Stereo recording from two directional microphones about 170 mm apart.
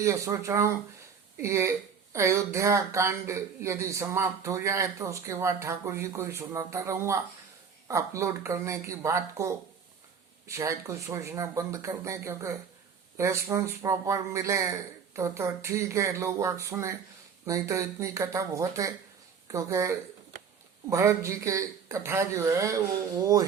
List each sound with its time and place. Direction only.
0.0 s speech: 20° right (ahead or behind)